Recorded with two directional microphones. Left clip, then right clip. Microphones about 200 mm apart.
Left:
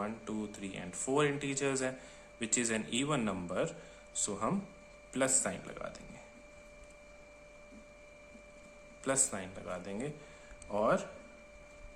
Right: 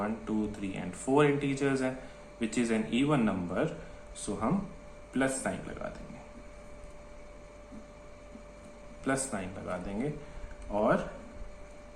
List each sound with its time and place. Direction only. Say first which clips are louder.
0.0 s speech: right 6 dB; 30° left (ahead or behind)
9.0 s speech: right 2 dB; 30° left (ahead or behind)